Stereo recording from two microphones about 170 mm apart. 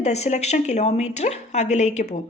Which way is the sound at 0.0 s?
40° left (ahead or behind).